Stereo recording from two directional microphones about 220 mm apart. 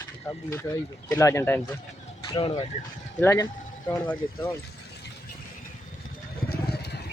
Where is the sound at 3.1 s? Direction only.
10° left (ahead or behind).